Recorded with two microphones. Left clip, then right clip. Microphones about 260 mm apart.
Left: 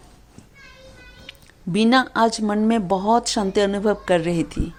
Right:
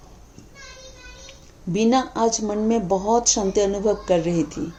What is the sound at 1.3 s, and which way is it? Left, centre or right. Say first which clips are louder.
Speech: left 1 dB; left.